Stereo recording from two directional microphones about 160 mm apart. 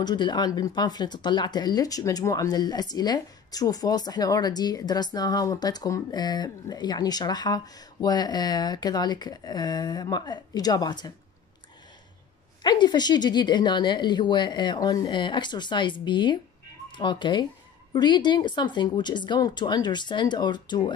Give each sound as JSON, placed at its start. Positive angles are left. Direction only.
{"t": 0.0, "sound": "speech", "side_deg": 25}
{"t": 12.6, "sound": "speech", "side_deg": 25}